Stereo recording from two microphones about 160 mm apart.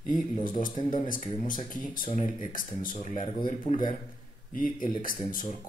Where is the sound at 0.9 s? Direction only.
55° left (ahead or behind).